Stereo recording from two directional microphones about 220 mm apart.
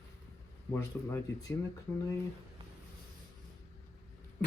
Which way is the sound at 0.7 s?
10° left (ahead or behind).